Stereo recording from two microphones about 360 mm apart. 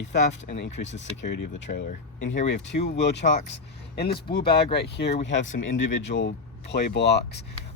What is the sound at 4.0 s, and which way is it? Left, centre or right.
Speech, left.